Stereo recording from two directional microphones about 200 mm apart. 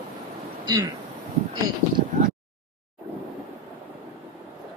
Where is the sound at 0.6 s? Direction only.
20° right (ahead or behind).